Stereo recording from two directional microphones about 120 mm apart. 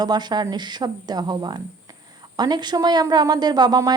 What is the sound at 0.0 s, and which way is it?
A woman's voice, 35° right (ahead or behind).